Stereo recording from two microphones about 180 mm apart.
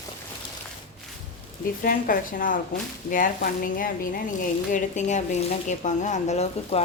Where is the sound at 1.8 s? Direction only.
50° left (ahead or behind).